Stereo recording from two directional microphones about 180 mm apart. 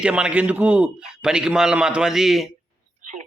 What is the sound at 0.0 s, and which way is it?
A man's voice, 5° right (ahead or behind).